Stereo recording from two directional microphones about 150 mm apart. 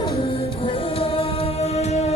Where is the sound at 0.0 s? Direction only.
40° left (ahead or behind).